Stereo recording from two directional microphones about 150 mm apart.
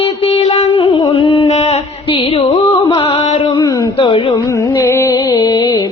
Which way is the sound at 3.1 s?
40° left (ahead or behind).